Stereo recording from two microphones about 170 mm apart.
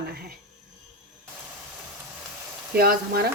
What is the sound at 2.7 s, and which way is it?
Speech, 60° right (ahead or behind).